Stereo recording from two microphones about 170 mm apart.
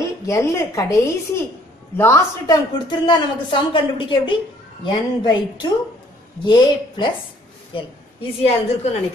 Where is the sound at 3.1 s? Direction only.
30° left (ahead or behind).